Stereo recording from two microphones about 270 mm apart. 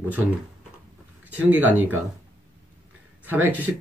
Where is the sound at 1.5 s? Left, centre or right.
Centre.